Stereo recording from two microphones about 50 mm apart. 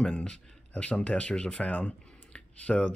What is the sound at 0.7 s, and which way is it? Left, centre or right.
Speech, left.